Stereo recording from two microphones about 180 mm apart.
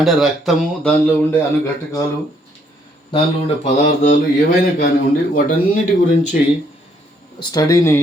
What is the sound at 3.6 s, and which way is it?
Mantra, 40° left (ahead or behind).